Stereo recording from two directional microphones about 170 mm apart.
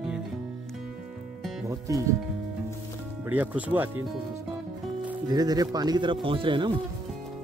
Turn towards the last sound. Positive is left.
turn(degrees=-30)  # may be behind; listen again after turning